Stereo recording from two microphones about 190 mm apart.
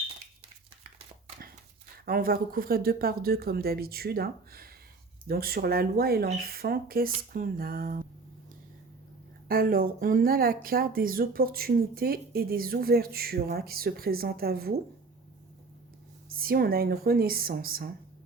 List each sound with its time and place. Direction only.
2.0 s speech: 50° right (ahead or behind)
9.5 s speech: 50° right (ahead or behind)
16.3 s speech: 50° right (ahead or behind)